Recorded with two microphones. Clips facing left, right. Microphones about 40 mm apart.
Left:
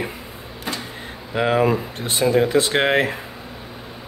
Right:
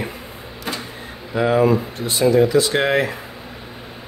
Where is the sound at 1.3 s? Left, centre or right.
Left.